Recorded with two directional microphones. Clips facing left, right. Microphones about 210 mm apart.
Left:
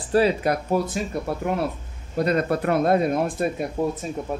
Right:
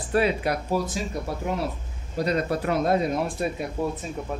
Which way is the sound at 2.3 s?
55° left (ahead or behind).